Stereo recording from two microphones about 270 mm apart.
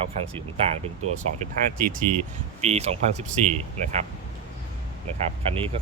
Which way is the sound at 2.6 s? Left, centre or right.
Right.